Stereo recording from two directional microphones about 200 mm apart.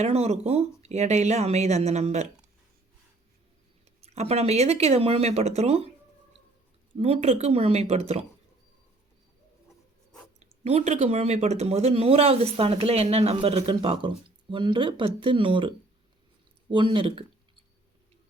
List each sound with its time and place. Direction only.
0.0 s speech: 30° right (ahead or behind)
4.0 s speech: 30° right (ahead or behind)
6.9 s speech: 30° right (ahead or behind)
10.4 s speech: 35° right (ahead or behind)
16.7 s speech: 25° right (ahead or behind)